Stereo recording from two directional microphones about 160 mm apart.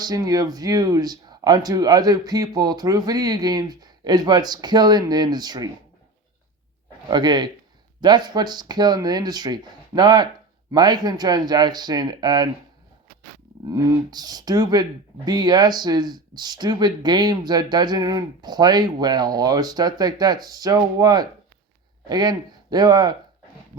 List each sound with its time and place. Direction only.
0.0 s speech: 25° right (ahead or behind)
7.1 s speech: 25° right (ahead or behind)
13.7 s speech: 25° right (ahead or behind)